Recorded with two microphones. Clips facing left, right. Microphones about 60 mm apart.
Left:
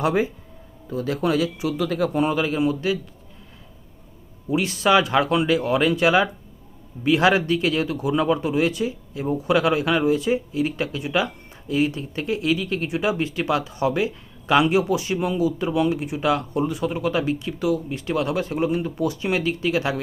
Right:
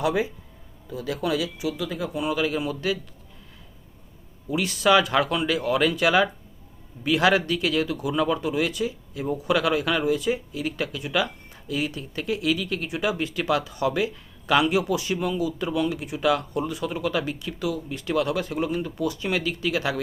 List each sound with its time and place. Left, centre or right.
0.0 s speech: left
2.2 s speech: left
4.4 s speech: left